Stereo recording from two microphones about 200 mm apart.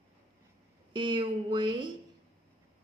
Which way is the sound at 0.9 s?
25° right (ahead or behind).